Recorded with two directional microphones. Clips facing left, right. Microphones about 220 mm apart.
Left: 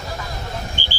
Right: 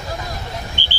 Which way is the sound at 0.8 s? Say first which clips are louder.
Left 1 dB; 45° left (ahead or behind).